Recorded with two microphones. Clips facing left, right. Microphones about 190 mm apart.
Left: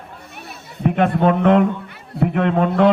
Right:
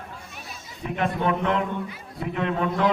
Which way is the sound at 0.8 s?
65° left (ahead or behind).